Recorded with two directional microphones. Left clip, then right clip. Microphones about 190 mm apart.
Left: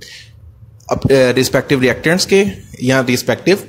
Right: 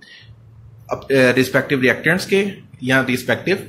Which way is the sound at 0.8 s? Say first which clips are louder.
Left 4 dB; 50° left (ahead or behind).